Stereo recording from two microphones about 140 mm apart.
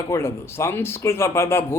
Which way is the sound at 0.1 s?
15° left (ahead or behind).